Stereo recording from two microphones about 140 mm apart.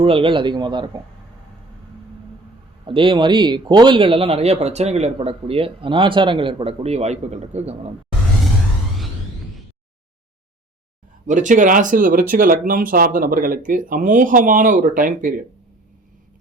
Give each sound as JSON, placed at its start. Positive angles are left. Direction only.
{"t": 0.0, "sound": "speech", "side_deg": -40}
{"t": 2.8, "sound": "speech", "side_deg": -40}
{"t": 11.3, "sound": "speech", "side_deg": -65}